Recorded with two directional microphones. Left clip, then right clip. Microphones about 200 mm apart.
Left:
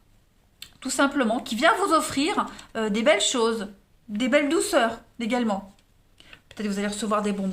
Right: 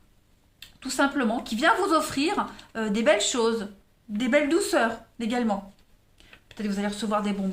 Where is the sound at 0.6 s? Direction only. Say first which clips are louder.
Left 1 dB; 35° left (ahead or behind).